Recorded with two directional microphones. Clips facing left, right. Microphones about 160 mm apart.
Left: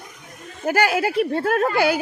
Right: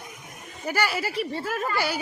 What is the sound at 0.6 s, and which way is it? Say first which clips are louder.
Speech: left 7 dB; 55° left (ahead or behind).